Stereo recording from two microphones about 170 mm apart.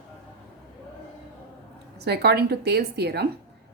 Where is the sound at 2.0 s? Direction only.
75° right (ahead or behind).